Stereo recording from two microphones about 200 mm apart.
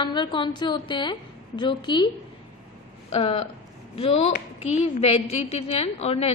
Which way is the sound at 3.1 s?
30° left (ahead or behind).